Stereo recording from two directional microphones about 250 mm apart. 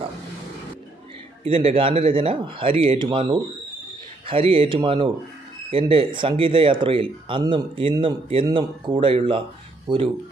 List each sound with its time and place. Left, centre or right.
1.4 s speech: right